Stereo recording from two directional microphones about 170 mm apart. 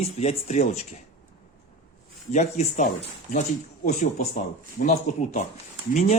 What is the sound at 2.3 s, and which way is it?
Speech, 45° left (ahead or behind).